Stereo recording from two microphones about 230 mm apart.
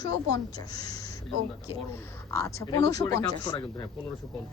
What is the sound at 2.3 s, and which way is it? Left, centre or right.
A woman's voice, centre.